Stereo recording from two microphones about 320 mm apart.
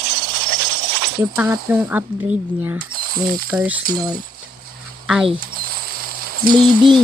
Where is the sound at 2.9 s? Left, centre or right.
Right.